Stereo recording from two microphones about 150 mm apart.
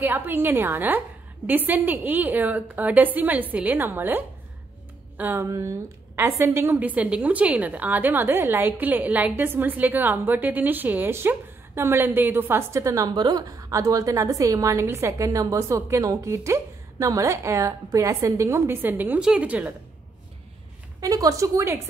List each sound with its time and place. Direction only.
0.0 s a woman's voice: 15° right (ahead or behind)
21.0 s a woman's voice: 25° right (ahead or behind)